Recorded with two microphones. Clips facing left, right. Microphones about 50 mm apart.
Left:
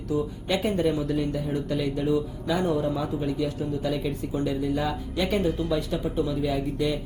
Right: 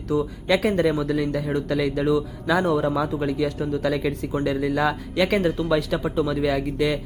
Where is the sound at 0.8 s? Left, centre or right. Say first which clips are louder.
Right 3 dB; right.